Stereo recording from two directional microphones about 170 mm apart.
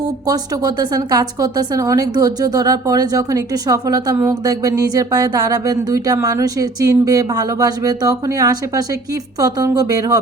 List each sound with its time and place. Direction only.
0.3 s a woman's voice: 20° right (ahead or behind)